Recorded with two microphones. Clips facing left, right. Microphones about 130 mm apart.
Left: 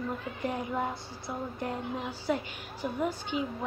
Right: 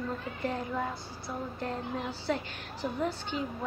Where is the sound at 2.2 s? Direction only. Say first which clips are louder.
Left 1 dB; 10° left (ahead or behind).